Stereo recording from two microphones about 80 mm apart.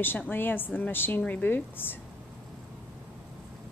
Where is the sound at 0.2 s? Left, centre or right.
Left.